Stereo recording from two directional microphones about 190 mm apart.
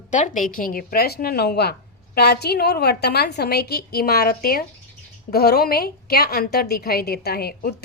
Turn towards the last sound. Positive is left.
turn(degrees=55)  # may be behind; listen again after turning